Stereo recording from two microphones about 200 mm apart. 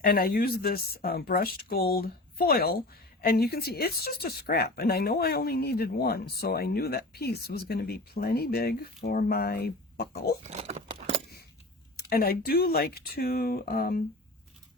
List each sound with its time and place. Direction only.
0.0 s speech: 50° left (ahead or behind)
10.4 s a sound: 35° right (ahead or behind)
11.9 s speech: 50° left (ahead or behind)